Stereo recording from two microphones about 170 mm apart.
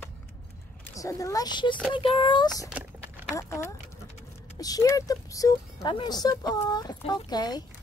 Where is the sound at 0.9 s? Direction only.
20° left (ahead or behind).